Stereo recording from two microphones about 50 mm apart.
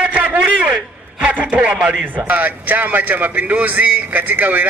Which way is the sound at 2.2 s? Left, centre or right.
Right.